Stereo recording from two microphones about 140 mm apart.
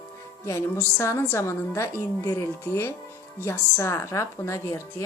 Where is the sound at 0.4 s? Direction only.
20° left (ahead or behind).